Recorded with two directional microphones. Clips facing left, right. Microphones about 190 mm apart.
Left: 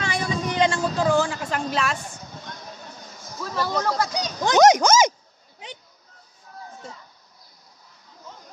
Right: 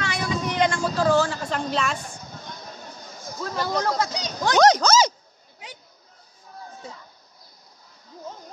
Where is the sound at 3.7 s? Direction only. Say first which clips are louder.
Even; 5° left (ahead or behind).